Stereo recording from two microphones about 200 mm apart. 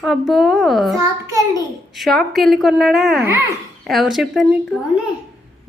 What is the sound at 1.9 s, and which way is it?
A woman's voice, centre (ahead or behind).